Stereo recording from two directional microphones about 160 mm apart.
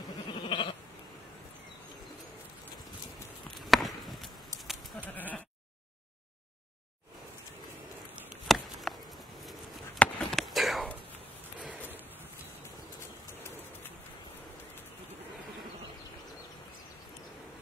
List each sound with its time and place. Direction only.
0.3 s goat: 30° left (ahead or behind)
3.7 s sheep: centre (ahead or behind)
5.1 s bleat: 10° left (ahead or behind)
8.5 s chop: centre (ahead or behind)
8.9 s a sound: centre (ahead or behind)